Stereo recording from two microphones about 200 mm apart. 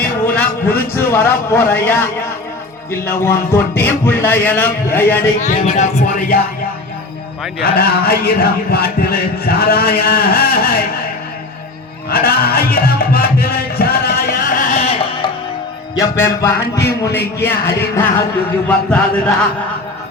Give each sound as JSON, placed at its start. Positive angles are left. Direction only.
{"t": 0.0, "sound": "a sound", "side_deg": 10}
{"t": 3.2, "sound": "a man's voice", "side_deg": 10}
{"t": 5.4, "sound": "speech", "side_deg": 35}
{"t": 7.6, "sound": "a sound", "side_deg": 50}
{"t": 12.1, "sound": "music", "side_deg": 50}
{"t": 14.9, "sound": "music", "side_deg": 30}
{"t": 16.0, "sound": "a man's voice", "side_deg": 15}